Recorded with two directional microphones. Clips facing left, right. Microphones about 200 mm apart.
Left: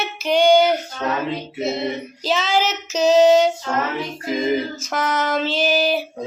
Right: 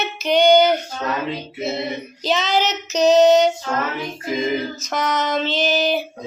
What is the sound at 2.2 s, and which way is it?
Child singing, 5° left (ahead or behind).